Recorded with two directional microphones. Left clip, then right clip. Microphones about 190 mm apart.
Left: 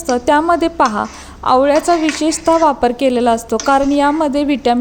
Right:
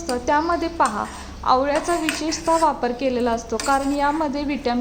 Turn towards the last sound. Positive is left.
turn(degrees=40)  # may be behind; listen again after turning